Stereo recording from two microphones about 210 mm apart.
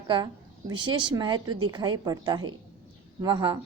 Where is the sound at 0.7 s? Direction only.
20° right (ahead or behind).